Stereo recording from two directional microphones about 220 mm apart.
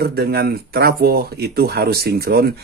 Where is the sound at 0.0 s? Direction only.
45° right (ahead or behind).